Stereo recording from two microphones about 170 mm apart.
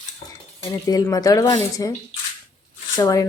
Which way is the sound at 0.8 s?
20° left (ahead or behind).